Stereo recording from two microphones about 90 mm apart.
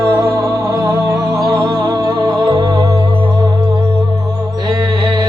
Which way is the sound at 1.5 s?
60° right (ahead or behind).